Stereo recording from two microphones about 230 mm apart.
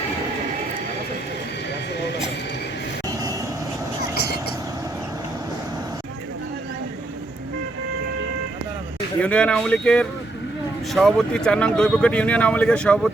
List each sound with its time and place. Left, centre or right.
4.1 s vehicle: left
9.2 s speech: centre